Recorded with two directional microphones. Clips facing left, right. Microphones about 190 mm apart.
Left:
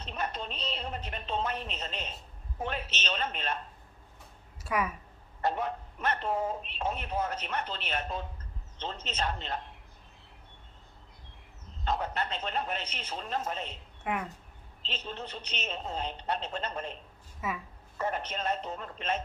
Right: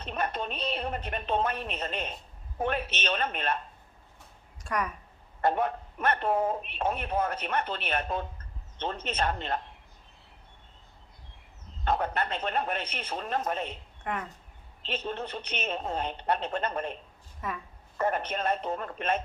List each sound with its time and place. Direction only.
0.0 s a man's voice: 55° right (ahead or behind)
4.6 s speech: 5° left (ahead or behind)
5.4 s a man's voice: 55° right (ahead or behind)
11.9 s a man's voice: 55° right (ahead or behind)
14.0 s speech: 5° left (ahead or behind)
14.8 s a man's voice: 55° right (ahead or behind)
17.4 s speech: 5° left (ahead or behind)
17.9 s a man's voice: 55° right (ahead or behind)